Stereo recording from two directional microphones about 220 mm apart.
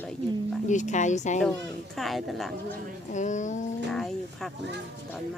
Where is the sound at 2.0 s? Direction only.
Centre (ahead or behind).